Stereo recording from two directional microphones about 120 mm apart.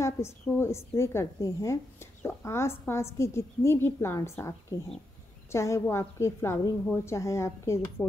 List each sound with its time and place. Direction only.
0.0 s a woman's voice: 25° left (ahead or behind)